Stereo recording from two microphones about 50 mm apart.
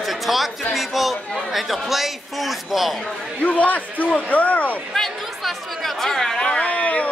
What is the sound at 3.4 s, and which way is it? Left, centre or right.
Speech, left.